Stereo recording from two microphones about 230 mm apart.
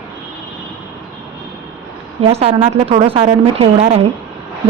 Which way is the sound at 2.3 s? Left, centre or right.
Right.